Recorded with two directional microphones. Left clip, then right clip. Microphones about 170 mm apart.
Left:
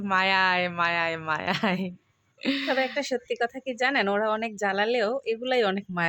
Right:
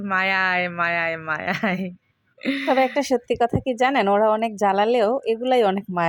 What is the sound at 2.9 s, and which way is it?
Speech, 30° right (ahead or behind).